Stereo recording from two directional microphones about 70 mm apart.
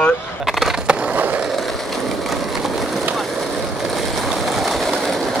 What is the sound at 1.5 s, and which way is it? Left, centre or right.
Skateboard, centre.